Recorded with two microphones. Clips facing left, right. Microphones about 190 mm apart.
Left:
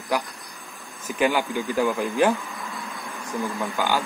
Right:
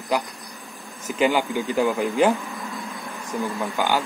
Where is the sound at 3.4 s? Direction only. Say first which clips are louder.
Right 1 dB; 15° right (ahead or behind).